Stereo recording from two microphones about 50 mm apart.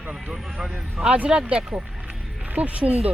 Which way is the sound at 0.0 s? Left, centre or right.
Right.